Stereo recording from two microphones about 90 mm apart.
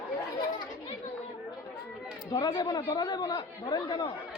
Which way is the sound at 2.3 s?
45° left (ahead or behind).